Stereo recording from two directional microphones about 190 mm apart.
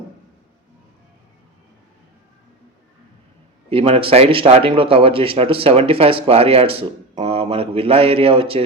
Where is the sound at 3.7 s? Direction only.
30° right (ahead or behind).